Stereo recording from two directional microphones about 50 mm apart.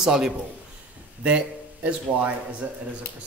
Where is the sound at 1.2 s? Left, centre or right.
Right.